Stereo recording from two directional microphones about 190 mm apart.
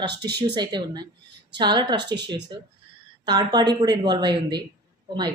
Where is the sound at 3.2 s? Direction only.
20° right (ahead or behind).